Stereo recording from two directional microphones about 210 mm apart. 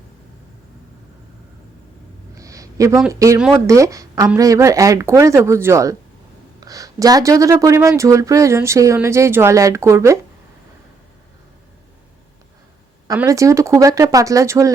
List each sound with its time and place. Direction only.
2.3 s a sound: 15° right (ahead or behind)
3.1 s speech: 15° right (ahead or behind)
13.1 s speech: 15° right (ahead or behind)